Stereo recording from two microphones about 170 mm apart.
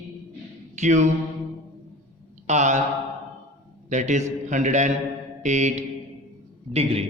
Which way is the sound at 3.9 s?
45° right (ahead or behind).